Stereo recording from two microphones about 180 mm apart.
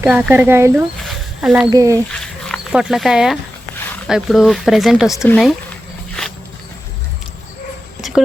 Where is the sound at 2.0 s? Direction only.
5° left (ahead or behind).